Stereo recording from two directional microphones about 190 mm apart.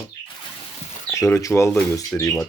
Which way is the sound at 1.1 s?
15° left (ahead or behind).